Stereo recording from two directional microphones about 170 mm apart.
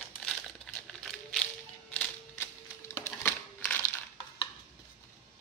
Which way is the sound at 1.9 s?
10° left (ahead or behind).